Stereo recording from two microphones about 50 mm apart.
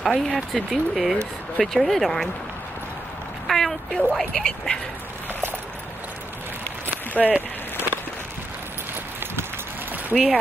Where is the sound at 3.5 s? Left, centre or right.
Centre.